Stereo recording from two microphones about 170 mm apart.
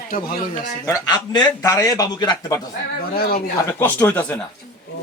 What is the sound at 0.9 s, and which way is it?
A man's voice, 20° left (ahead or behind).